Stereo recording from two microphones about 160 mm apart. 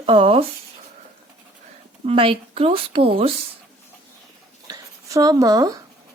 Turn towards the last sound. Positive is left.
turn(degrees=-25)  # may be behind; listen again after turning